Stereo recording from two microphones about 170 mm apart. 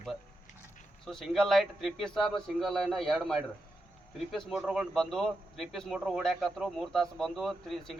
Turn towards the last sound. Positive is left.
turn(degrees=0)  # may be behind; listen again after turning